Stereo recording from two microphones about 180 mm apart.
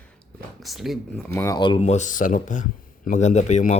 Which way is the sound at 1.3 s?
20° left (ahead or behind).